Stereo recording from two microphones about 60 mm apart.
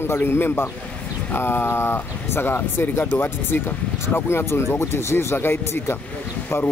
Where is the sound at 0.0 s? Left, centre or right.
Left.